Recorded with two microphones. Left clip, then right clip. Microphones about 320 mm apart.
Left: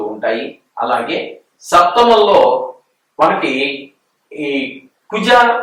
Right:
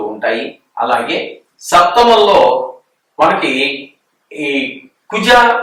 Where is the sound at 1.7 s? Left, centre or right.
Centre.